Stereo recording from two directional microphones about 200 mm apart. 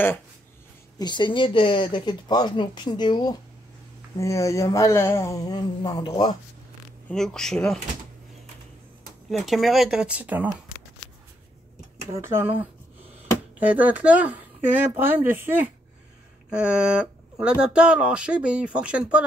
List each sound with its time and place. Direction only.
0.9 s speech: 20° left (ahead or behind)
7.1 s speech: centre (ahead or behind)
9.3 s speech: centre (ahead or behind)
12.1 s speech: 15° right (ahead or behind)